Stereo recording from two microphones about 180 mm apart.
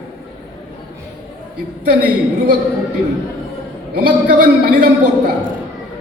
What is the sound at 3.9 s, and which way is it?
Speech, 55° right (ahead or behind).